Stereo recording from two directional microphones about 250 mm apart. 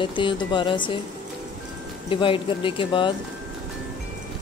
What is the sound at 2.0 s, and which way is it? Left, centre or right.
Speech, left.